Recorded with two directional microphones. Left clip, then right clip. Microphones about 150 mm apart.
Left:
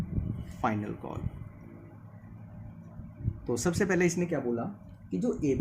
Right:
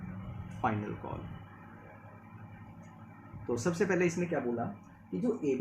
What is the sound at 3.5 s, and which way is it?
Speech, 90° left.